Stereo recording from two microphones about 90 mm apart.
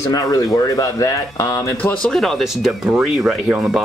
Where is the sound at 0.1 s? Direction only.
40° left (ahead or behind).